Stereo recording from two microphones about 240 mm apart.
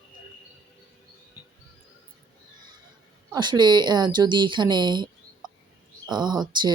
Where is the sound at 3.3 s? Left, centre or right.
Centre.